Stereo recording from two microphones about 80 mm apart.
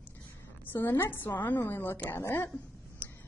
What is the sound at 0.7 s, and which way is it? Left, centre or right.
A woman's voice, left.